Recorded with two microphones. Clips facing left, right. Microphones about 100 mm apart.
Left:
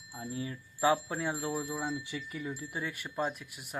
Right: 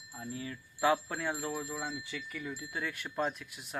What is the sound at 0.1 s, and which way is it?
Speech, 20° left (ahead or behind).